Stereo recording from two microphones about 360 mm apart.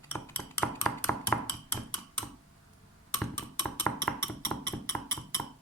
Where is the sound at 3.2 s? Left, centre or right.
Centre.